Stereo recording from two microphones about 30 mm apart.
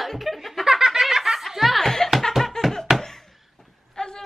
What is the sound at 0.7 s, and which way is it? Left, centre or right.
Snicker, centre.